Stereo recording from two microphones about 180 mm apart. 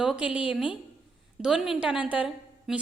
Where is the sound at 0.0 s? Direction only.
5° right (ahead or behind).